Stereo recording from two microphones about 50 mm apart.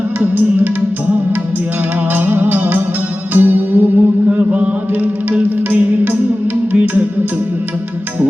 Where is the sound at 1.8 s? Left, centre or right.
Right.